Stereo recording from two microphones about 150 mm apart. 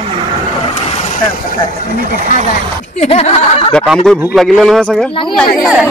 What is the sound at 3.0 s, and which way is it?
Speech, 45° left (ahead or behind).